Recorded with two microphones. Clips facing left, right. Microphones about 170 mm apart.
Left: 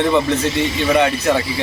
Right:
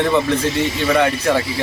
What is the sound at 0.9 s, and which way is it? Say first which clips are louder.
Speech: left 1 dB; 15° left (ahead or behind).